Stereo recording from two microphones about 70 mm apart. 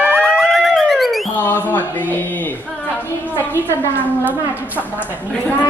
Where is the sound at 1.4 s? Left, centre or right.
Left.